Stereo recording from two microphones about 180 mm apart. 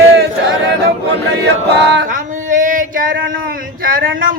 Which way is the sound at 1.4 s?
75° right (ahead or behind).